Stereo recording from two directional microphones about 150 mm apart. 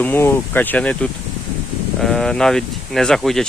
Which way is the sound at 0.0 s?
15° left (ahead or behind).